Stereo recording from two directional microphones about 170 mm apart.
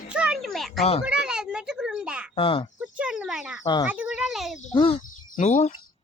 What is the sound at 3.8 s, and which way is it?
Speech, 10° right (ahead or behind).